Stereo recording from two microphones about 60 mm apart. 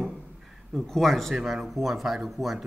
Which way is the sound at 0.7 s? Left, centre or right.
Centre.